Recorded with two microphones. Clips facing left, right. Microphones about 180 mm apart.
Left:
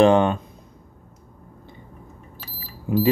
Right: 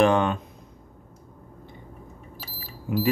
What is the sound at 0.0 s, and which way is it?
Speech, 25° left (ahead or behind).